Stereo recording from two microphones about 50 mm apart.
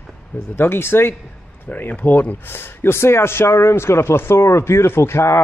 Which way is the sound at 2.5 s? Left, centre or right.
Left.